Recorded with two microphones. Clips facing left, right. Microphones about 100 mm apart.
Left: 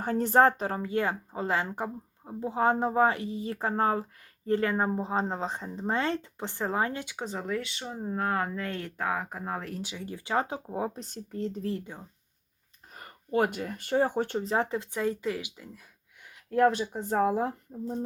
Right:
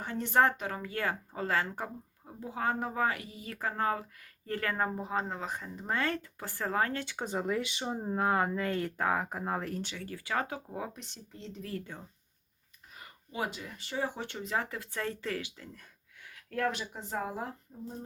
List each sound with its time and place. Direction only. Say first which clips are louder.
0.0 s speech: left 5 dB; 40° left (ahead or behind); by 7.2 s 15° left (ahead or behind)
7.2 s speech: right 1 dB; 5° right (ahead or behind)
9.8 s speech: left 3 dB; 15° left (ahead or behind); by 11.6 s 45° left (ahead or behind)
12.9 s speech: left 15 dB; 45° left (ahead or behind); by 15.8 s 10° left (ahead or behind)
16.5 s speech: left 9 dB; 25° left (ahead or behind)
17.0 s speech: left 12 dB; 50° left (ahead or behind)